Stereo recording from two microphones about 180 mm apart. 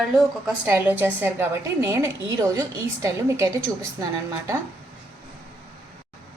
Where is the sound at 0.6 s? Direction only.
10° right (ahead or behind).